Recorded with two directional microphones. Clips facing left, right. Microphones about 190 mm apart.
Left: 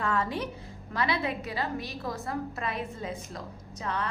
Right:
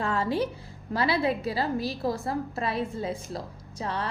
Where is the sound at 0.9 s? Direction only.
30° right (ahead or behind).